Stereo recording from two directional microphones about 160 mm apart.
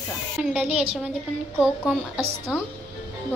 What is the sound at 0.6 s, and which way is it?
Speech, 40° right (ahead or behind).